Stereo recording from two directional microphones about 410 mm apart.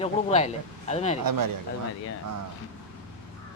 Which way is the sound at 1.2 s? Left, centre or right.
Right.